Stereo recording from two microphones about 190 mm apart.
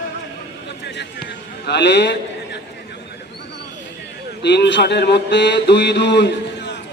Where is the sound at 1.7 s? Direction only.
65° left (ahead or behind).